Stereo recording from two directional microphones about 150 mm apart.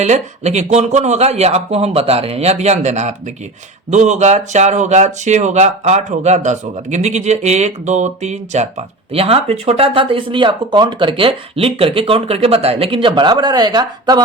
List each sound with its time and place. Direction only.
0.0 s speech: 50° right (ahead or behind); by 14.2 s 25° right (ahead or behind)